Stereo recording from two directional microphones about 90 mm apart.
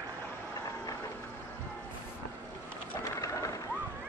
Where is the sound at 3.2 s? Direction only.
35° left (ahead or behind).